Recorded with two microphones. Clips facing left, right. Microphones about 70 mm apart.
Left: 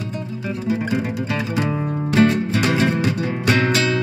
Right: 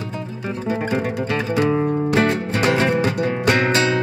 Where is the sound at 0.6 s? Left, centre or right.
Right.